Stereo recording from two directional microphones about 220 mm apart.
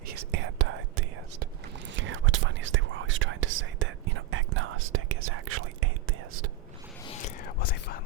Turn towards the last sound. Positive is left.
turn(degrees=45)  # may be behind; listen again after turning